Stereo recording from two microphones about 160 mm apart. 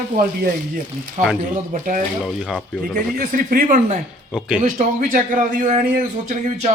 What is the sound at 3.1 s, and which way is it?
Speech, 60° right (ahead or behind).